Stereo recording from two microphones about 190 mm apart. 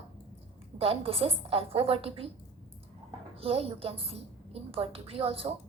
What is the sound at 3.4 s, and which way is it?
A woman's voice, 30° right (ahead or behind).